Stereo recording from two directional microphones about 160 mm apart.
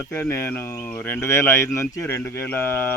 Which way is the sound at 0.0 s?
15° left (ahead or behind).